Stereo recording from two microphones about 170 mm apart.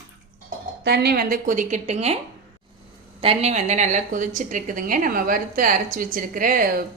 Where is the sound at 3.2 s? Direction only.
35° right (ahead or behind); by 6.8 s 55° right (ahead or behind).